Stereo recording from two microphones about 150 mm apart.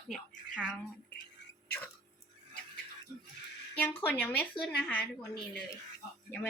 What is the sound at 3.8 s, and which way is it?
A woman's voice, 15° left (ahead or behind).